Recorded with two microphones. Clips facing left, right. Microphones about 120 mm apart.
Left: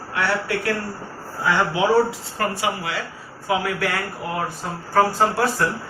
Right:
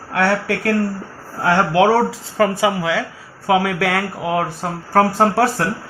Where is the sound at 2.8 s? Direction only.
90° right.